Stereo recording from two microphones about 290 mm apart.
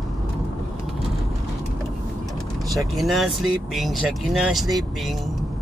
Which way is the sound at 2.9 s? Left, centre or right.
Centre.